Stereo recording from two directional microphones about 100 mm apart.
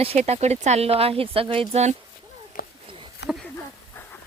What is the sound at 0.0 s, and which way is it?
Speech, 85° right.